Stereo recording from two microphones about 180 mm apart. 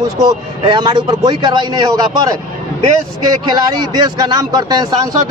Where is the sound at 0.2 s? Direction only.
25° right (ahead or behind).